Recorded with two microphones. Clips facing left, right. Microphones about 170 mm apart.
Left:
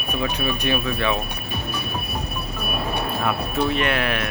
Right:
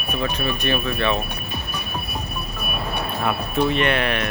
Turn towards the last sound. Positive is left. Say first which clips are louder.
# right 2 dB
turn(degrees=5)  # may be behind; listen again after turning